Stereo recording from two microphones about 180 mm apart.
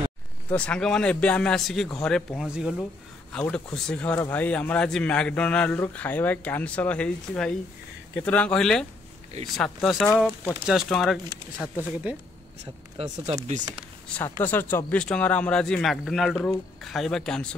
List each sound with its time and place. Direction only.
0.5 s a man's voice: 5° left (ahead or behind)
2.8 s a man's voice: 5° left (ahead or behind)
12.9 s speech: 35° right (ahead or behind)
14.0 s a man's voice: 10° left (ahead or behind)